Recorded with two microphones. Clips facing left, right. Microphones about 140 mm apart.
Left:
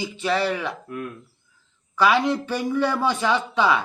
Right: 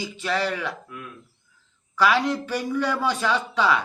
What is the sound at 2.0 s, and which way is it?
Speech, 20° left (ahead or behind).